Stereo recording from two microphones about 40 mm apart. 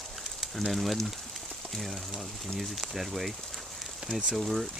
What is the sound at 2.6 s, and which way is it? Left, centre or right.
Speech, centre.